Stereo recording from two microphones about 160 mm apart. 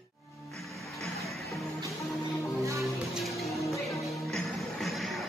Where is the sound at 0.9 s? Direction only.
Centre (ahead or behind).